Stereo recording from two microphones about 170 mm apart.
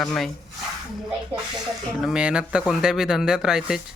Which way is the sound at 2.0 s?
5° right (ahead or behind).